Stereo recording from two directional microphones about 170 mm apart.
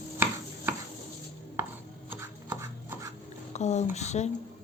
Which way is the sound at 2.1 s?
15° right (ahead or behind).